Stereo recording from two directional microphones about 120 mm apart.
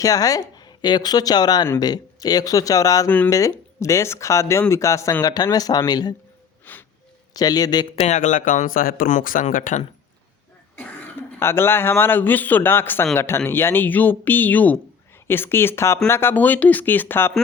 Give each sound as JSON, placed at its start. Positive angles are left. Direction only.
{"t": 0.0, "sound": "speech", "side_deg": 30}
{"t": 6.7, "sound": "wheeze", "side_deg": 15}
{"t": 7.3, "sound": "speech", "side_deg": 35}
{"t": 7.9, "sound": "speech", "side_deg": 70}
{"t": 11.3, "sound": "a man's voice", "side_deg": 20}